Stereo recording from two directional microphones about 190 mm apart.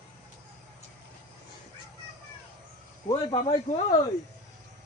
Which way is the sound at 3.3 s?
25° left (ahead or behind).